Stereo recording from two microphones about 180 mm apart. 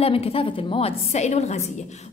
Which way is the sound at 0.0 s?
35° left (ahead or behind).